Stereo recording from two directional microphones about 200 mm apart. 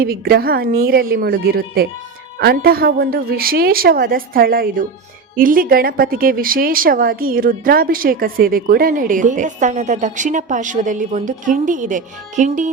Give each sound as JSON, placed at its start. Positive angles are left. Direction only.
{"t": 0.0, "sound": "a woman's voice", "side_deg": -50}